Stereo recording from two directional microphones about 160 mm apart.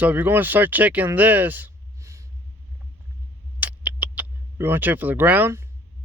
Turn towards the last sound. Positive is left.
turn(degrees=-15)  # may be behind; listen again after turning